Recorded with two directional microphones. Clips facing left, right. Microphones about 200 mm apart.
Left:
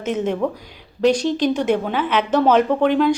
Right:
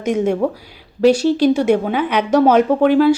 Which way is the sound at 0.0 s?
10° right (ahead or behind).